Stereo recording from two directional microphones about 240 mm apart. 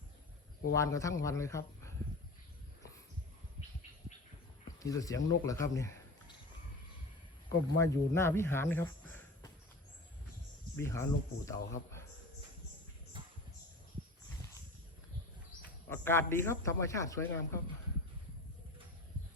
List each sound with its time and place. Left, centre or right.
0.7 s a man's voice: centre
4.8 s speech: centre
7.8 s speech: centre
10.8 s a man's voice: centre
13.2 s a sound: centre
15.9 s a man's voice: centre